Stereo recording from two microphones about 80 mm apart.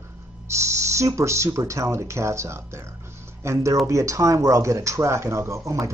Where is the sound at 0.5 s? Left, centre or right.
Right.